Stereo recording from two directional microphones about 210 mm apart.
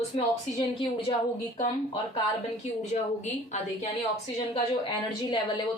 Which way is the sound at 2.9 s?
35° left (ahead or behind).